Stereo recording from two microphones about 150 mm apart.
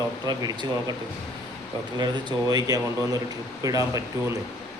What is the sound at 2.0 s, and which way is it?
A man's voice, 25° right (ahead or behind).